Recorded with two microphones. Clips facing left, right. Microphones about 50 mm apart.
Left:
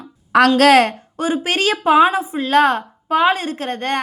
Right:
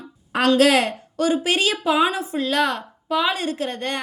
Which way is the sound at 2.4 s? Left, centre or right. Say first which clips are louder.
Left 8 dB; left.